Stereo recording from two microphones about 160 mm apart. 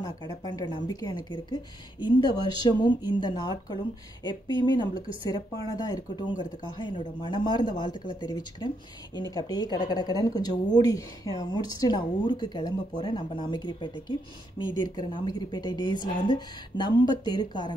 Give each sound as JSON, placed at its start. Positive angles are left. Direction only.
{"t": 0.0, "sound": "speech", "side_deg": 25}